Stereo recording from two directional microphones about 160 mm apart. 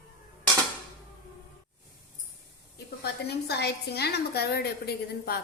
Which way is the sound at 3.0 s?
90° left.